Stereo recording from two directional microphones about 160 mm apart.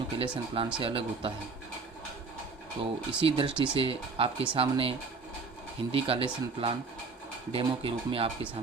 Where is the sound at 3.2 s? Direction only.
30° right (ahead or behind).